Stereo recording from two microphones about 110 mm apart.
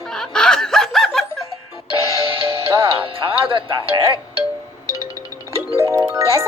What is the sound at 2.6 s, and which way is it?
Speech, 25° right (ahead or behind).